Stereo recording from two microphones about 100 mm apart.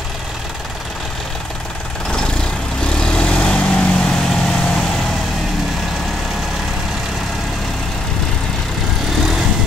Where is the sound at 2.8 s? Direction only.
10° left (ahead or behind).